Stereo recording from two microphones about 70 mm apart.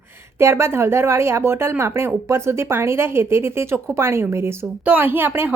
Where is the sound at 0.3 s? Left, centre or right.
Right.